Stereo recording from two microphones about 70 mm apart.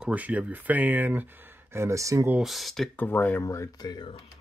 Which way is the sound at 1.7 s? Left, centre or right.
Right.